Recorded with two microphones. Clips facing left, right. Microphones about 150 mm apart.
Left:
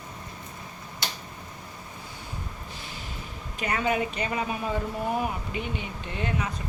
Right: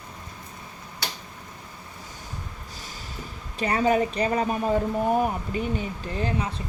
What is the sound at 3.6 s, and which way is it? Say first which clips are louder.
Speech: right 5 dB; 35° right (ahead or behind).